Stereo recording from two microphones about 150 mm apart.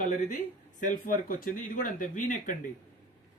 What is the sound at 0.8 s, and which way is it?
Speech, 65° left (ahead or behind).